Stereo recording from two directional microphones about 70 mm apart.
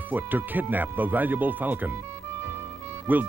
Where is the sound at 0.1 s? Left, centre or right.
Right.